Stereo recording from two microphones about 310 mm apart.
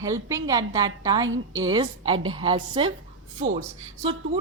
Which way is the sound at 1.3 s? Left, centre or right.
Right.